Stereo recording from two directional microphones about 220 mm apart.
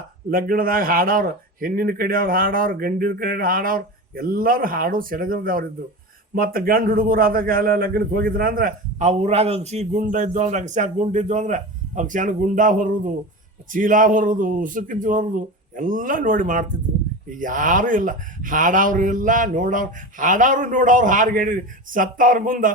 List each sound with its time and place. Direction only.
0.3 s a man's voice: 40° right (ahead or behind)